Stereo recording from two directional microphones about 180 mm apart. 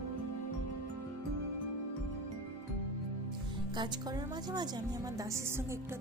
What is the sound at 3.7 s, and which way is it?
A woman's voice, 25° right (ahead or behind).